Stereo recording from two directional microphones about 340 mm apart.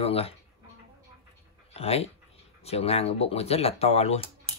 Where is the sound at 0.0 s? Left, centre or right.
Centre.